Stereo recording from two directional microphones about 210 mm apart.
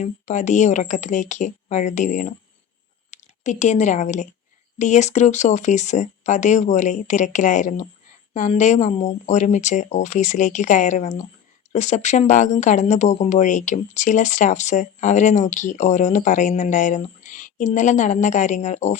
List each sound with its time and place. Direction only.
0.0 s speech: 35° left (ahead or behind)